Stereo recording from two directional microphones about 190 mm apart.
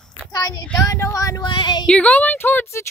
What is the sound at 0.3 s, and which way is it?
Female singing, 20° left (ahead or behind).